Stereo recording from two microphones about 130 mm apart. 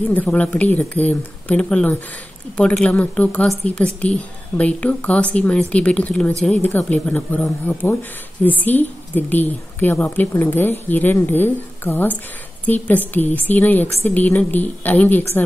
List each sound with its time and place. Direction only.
0.1 s a woman's voice: 15° left (ahead or behind)